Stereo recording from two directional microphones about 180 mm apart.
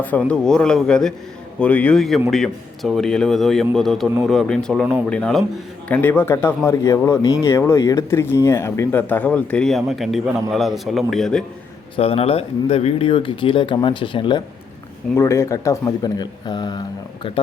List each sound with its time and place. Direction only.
0.0 s a man's voice: 10° left (ahead or behind)
11.9 s speech: 35° left (ahead or behind)
15.1 s speech: 15° left (ahead or behind)